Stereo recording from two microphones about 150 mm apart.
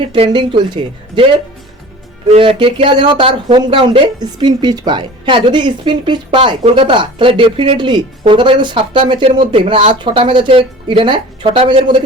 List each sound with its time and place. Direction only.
0.0 s speech: 35° right (ahead or behind)
2.3 s speech: 35° right (ahead or behind)